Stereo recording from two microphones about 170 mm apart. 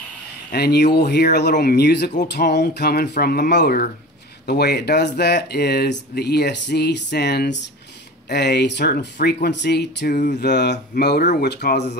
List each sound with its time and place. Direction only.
0.5 s speech: 65° left (ahead or behind)
10.1 s a sound: 50° left (ahead or behind)
10.4 s speech: 80° left